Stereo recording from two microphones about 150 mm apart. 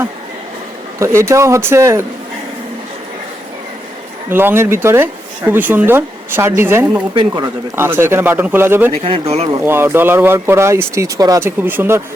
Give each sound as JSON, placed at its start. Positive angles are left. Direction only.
{"t": 0.9, "sound": "speech", "side_deg": -20}
{"t": 4.3, "sound": "speech", "side_deg": -15}
{"t": 7.1, "sound": "speech", "side_deg": -30}
{"t": 7.8, "sound": "speech", "side_deg": -15}
{"t": 9.0, "sound": "speech", "side_deg": -40}
{"t": 9.5, "sound": "speech", "side_deg": -20}